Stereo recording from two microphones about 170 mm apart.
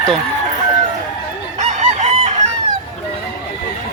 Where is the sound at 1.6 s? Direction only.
45° right (ahead or behind).